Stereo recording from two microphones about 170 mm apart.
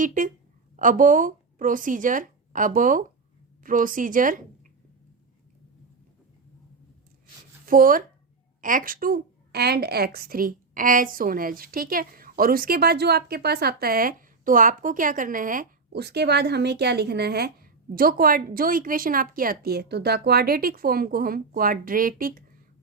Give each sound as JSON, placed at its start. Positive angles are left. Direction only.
{"t": 0.0, "sound": "speech", "side_deg": -50}
{"t": 7.6, "sound": "a woman's voice", "side_deg": -55}
{"t": 15.9, "sound": "a woman's voice", "side_deg": -80}